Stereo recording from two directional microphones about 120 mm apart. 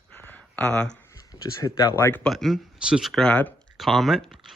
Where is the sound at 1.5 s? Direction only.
25° left (ahead or behind).